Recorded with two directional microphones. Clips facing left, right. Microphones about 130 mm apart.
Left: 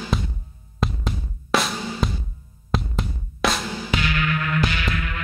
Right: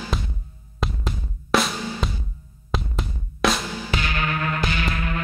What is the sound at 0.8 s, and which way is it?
Drum, centre (ahead or behind).